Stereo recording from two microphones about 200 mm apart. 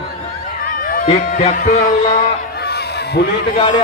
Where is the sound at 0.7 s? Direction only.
45° left (ahead or behind).